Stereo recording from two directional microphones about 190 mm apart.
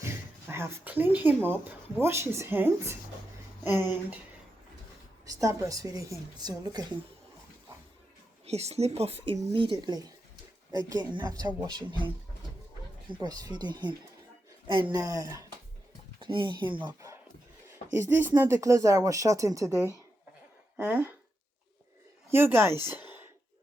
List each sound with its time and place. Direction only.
0.0 s speech: 15° right (ahead or behind)
5.2 s speech: 15° right (ahead or behind)
8.4 s speech: 35° right (ahead or behind)
13.1 s speech: 20° right (ahead or behind)
22.3 s speech: 10° right (ahead or behind)